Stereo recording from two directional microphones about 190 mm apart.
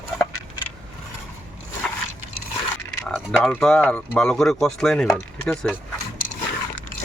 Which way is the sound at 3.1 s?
Centre (ahead or behind).